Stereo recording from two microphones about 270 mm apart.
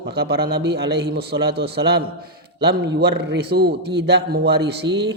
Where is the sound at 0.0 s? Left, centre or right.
Right.